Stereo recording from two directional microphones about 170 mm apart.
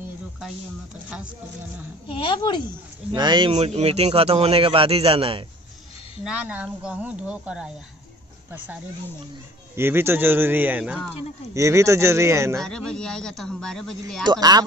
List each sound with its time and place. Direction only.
2.0 s speech: 30° left (ahead or behind)
3.2 s speech: 25° right (ahead or behind)
6.2 s speech: 5° right (ahead or behind)
9.8 s speech: 15° right (ahead or behind)
11.5 s speech: 15° right (ahead or behind)
12.5 s speech: 5° left (ahead or behind)
14.2 s speech: 25° right (ahead or behind)